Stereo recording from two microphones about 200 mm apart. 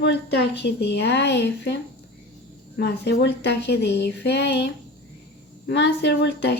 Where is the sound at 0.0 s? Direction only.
55° left (ahead or behind).